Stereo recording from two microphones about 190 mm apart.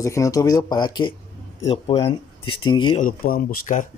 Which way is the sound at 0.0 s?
15° left (ahead or behind).